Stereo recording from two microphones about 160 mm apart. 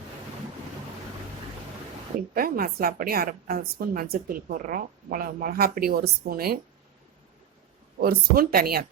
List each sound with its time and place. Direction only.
2.3 s a woman's voice: 65° right (ahead or behind)
7.9 s speech: 70° right (ahead or behind)